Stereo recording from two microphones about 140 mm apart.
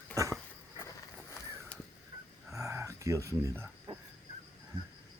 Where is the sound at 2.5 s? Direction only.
20° right (ahead or behind).